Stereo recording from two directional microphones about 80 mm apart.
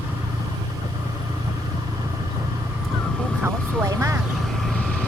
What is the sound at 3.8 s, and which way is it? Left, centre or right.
Vehicle, right.